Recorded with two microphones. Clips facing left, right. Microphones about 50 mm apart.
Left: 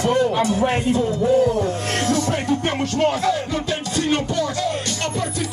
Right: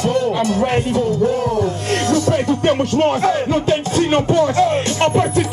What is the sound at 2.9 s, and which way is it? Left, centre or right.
Music, right.